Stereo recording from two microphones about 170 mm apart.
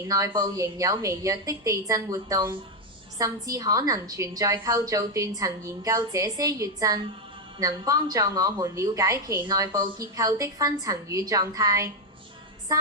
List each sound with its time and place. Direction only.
0.1 s a woman's voice: 20° right (ahead or behind)